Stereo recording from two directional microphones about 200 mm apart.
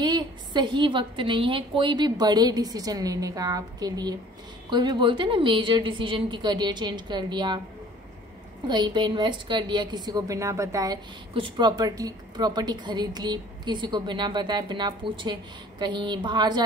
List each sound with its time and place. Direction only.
0.0 s a woman's voice: 20° right (ahead or behind)
8.6 s a woman's voice: 20° right (ahead or behind)